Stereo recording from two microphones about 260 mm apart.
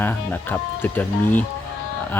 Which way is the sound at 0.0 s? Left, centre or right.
Centre.